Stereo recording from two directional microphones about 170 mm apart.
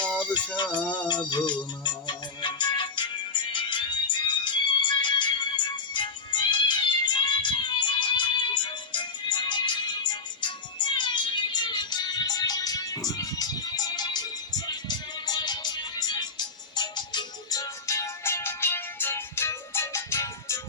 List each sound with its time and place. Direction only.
0.0 s music: 5° left (ahead or behind)
0.5 s music: 25° left (ahead or behind)